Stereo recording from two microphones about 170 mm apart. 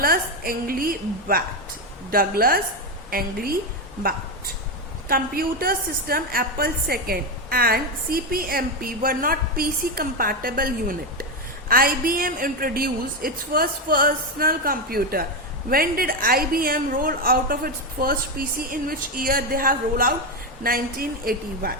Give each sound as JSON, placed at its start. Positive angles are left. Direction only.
{"t": 0.0, "sound": "a woman's voice", "side_deg": -60}
{"t": 5.0, "sound": "a woman's voice", "side_deg": -60}